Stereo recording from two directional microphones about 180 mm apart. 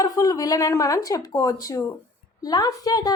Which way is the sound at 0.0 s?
20° left (ahead or behind).